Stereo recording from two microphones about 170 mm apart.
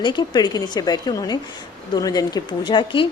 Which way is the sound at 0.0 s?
25° left (ahead or behind).